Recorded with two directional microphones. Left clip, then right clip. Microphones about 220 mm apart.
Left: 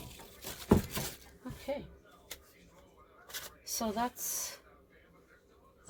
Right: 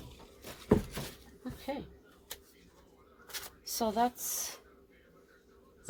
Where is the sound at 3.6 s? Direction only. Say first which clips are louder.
Right 4 dB; 30° right (ahead or behind).